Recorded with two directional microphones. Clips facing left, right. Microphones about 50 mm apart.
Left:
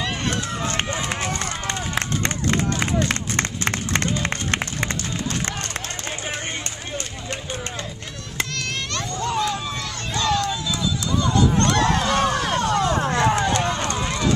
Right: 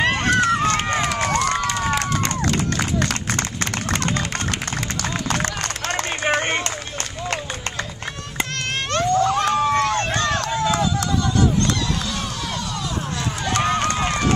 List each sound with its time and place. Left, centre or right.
0.0 s run: right
2.0 s run: left
6.2 s run: right
8.9 s run: right
11.3 s a sound: left
13.5 s run: right